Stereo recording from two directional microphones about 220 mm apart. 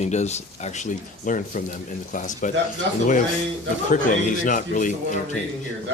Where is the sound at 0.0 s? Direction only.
30° left (ahead or behind).